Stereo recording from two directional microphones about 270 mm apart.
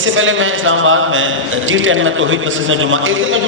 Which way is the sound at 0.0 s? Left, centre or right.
Right.